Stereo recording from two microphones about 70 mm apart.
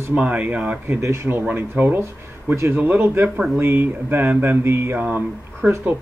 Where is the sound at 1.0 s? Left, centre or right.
Right.